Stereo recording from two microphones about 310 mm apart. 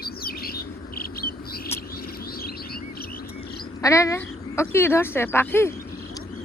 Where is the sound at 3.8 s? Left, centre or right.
Centre.